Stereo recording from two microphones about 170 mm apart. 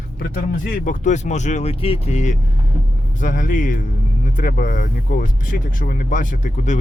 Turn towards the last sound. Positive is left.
turn(degrees=50)  # may be behind; listen again after turning